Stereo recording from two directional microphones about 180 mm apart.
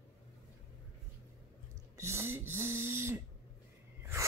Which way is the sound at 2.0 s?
15° right (ahead or behind).